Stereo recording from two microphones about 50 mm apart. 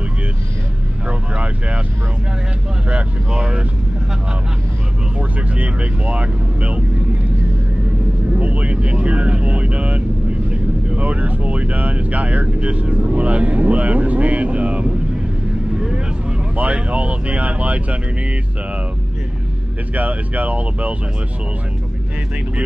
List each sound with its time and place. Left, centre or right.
1.3 s speech: right
2.9 s speech: right
5.6 s speech: right
8.4 s speech: right
16.5 s speech: right
20.0 s speech: right